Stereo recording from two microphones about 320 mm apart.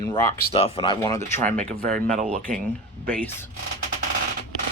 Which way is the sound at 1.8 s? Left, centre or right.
Right.